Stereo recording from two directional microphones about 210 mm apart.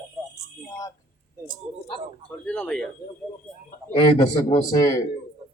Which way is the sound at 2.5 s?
5° left (ahead or behind).